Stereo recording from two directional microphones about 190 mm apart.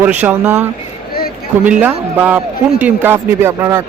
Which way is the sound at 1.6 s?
5° right (ahead or behind).